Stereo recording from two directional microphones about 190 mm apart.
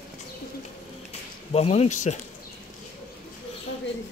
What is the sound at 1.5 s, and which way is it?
Speech, 35° left (ahead or behind).